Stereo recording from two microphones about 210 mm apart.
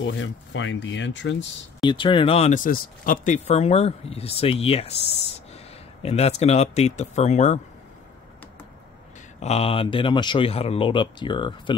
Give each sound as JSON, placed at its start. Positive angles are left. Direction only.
{"t": 0.0, "sound": "speech", "side_deg": 60}
{"t": 1.8, "sound": "speech", "side_deg": 20}
{"t": 6.0, "sound": "speech", "side_deg": 30}
{"t": 9.4, "sound": "speech", "side_deg": 30}